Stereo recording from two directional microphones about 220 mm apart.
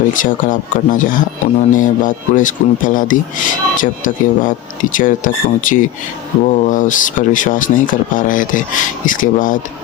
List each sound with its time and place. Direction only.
0.1 s speech: 35° left (ahead or behind)